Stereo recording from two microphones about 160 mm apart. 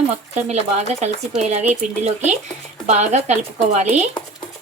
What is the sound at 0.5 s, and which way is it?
Speech, 40° right (ahead or behind).